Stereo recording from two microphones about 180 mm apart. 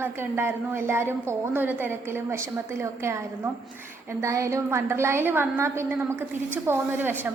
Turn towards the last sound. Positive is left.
turn(degrees=-10)  # may be behind; listen again after turning